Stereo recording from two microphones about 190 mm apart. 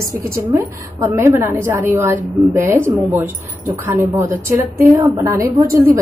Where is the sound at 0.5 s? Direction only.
15° right (ahead or behind).